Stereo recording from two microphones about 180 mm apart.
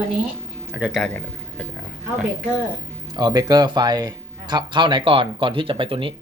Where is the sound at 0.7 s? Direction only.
5° right (ahead or behind).